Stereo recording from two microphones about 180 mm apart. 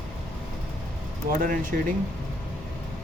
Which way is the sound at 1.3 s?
50° right (ahead or behind).